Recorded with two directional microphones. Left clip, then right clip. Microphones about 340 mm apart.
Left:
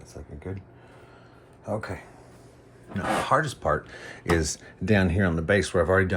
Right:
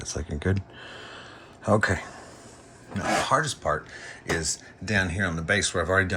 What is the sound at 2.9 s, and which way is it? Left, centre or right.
Speech, centre.